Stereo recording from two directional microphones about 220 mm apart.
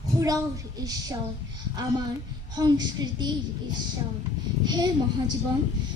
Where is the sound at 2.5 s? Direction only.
20° right (ahead or behind).